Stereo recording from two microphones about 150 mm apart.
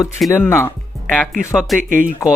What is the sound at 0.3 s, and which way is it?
Speech, 15° left (ahead or behind).